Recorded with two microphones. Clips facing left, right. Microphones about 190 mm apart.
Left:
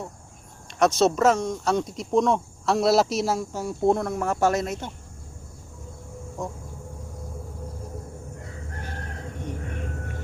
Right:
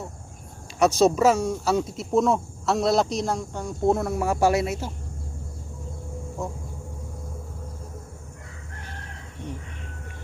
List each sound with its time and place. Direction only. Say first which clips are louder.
0.8 s speech: right 1 dB; 10° right (ahead or behind)
6.4 s speech: even; 5° right (ahead or behind)